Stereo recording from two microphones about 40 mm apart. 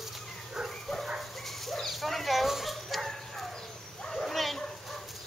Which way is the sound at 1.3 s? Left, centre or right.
Centre.